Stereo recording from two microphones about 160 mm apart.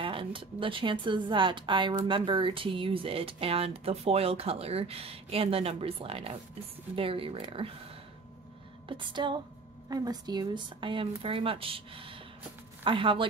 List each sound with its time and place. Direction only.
0.0 s speech: 35° right (ahead or behind)
8.8 s music: 30° right (ahead or behind)
9.8 s speech: 25° right (ahead or behind)